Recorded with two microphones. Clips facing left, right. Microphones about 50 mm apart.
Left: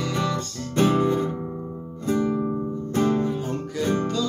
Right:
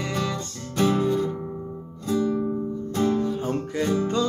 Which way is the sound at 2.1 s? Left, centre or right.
Left.